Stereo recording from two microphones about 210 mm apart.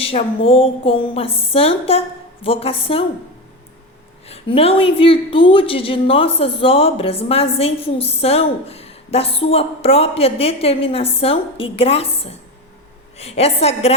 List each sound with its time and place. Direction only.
0.0 s a woman's voice: 25° left (ahead or behind)
4.3 s a woman's voice: 25° left (ahead or behind)